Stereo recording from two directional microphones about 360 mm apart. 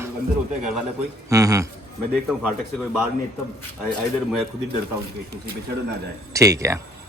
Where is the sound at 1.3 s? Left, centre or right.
Centre.